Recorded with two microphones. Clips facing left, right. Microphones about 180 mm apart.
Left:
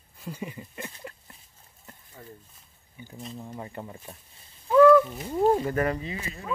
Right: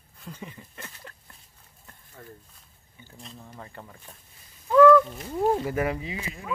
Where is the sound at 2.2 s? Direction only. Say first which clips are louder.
Right 1 dB; 5° left (ahead or behind).